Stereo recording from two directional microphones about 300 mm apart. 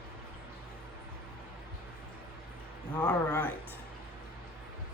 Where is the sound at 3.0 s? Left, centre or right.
Centre.